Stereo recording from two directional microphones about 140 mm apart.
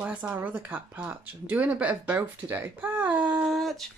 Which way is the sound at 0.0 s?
10° right (ahead or behind).